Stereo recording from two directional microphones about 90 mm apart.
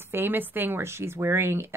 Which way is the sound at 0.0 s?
25° right (ahead or behind).